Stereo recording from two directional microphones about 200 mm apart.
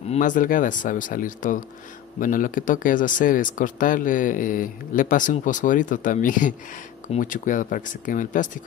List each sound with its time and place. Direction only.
0.1 s speech: 40° left (ahead or behind)